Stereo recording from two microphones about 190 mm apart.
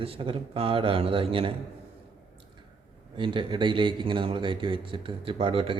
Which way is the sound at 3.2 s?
25° right (ahead or behind).